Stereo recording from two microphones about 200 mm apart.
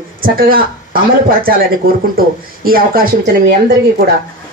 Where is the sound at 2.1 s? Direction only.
45° right (ahead or behind).